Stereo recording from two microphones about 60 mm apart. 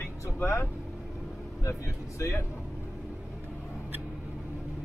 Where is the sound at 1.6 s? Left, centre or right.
Left.